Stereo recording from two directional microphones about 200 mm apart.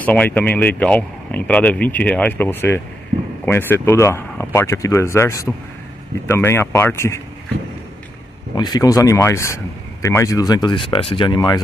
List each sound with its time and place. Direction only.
0.0 s speech: 10° left (ahead or behind)
8.5 s speech: 20° left (ahead or behind)